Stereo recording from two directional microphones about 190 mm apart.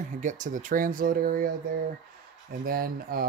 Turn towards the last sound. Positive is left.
turn(degrees=-50)  # may be behind; listen again after turning